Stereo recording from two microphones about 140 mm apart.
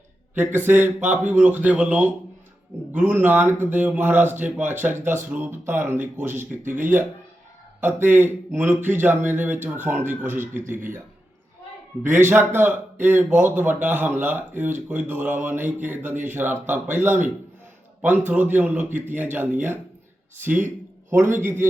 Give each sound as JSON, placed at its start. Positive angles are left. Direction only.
{"t": 0.3, "sound": "speech", "side_deg": -15}
{"t": 7.8, "sound": "speech", "side_deg": -15}
{"t": 10.4, "sound": "speech", "side_deg": -70}
{"t": 12.0, "sound": "speech", "side_deg": -15}
{"t": 18.3, "sound": "speech", "side_deg": -15}